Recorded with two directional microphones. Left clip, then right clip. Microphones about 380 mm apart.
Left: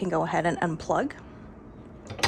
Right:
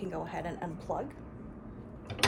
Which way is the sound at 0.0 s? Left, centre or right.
Centre.